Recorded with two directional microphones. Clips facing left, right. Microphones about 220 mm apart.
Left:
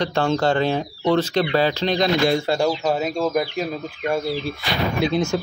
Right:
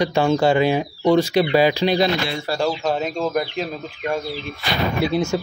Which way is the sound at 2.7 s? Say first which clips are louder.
Left 1 dB; 5° left (ahead or behind).